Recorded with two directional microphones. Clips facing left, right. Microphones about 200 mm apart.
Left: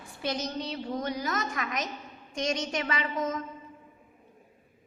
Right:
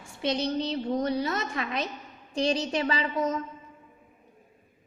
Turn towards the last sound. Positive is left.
turn(degrees=-35)  # may be behind; listen again after turning